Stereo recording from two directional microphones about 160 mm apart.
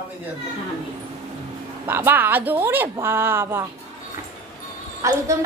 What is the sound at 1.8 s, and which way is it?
A woman's voice, 15° right (ahead or behind).